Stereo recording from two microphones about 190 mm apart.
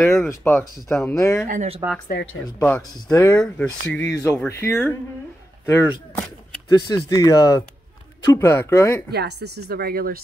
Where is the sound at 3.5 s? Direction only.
10° left (ahead or behind).